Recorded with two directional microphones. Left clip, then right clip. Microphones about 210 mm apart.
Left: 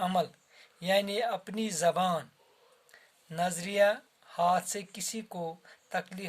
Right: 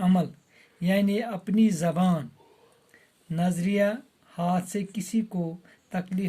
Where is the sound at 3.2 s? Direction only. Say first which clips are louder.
Right 2 dB; 40° left (ahead or behind).